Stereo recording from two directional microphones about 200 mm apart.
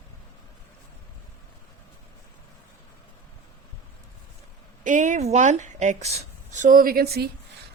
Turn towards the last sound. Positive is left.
turn(degrees=-50)  # may be behind; listen again after turning